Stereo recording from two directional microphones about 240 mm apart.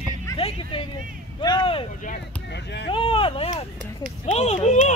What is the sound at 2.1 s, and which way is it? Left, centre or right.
Speech, left.